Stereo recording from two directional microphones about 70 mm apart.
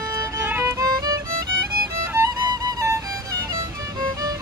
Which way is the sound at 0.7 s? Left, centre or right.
Right.